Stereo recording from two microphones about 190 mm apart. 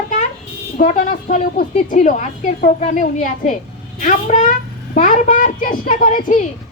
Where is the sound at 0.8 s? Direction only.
45° left (ahead or behind).